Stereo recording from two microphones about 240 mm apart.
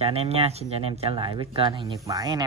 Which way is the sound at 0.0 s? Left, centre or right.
Right.